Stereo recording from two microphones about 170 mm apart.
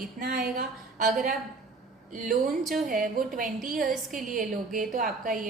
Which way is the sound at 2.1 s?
55° right (ahead or behind).